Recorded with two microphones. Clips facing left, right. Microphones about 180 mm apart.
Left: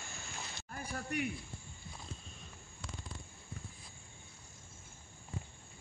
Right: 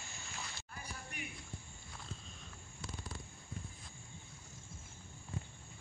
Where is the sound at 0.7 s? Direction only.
55° left (ahead or behind).